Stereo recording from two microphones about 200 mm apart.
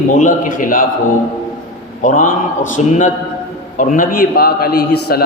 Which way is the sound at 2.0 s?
40° left (ahead or behind).